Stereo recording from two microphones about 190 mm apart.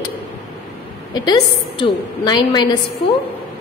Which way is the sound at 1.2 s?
25° left (ahead or behind).